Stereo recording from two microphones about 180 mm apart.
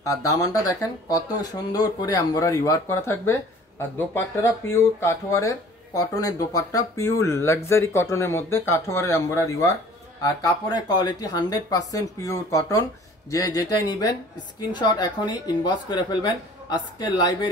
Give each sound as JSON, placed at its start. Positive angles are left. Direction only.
{"t": 0.0, "sound": "speech", "side_deg": 20}